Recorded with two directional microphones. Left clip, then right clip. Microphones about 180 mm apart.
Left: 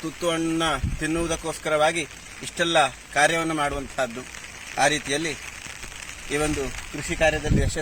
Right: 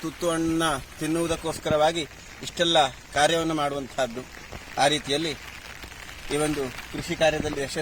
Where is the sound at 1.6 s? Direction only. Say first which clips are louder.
Left 1 dB; 20° left (ahead or behind).